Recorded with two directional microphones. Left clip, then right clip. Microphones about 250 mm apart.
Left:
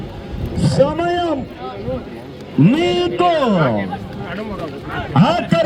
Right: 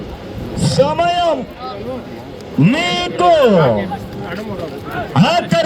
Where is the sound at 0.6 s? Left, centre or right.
Right.